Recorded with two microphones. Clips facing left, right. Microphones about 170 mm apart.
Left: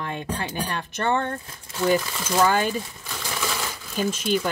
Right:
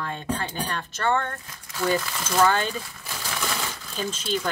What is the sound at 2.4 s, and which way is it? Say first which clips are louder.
Speech: left 1 dB; 10° left (ahead or behind).